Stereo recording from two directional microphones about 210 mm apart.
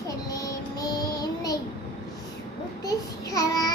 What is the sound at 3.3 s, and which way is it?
Child singing, 15° left (ahead or behind).